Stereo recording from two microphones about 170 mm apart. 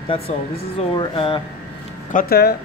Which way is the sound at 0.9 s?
30° left (ahead or behind).